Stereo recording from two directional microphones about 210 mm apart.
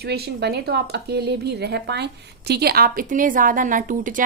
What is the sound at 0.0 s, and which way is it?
Speech, 50° right (ahead or behind).